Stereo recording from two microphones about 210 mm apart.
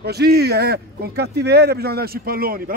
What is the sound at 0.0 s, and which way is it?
Speech, 50° right (ahead or behind).